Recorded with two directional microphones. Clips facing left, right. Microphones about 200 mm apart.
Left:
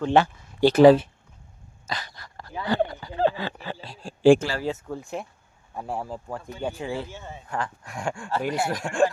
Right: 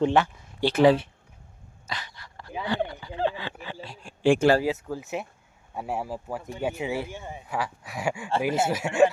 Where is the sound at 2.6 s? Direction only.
40° left (ahead or behind).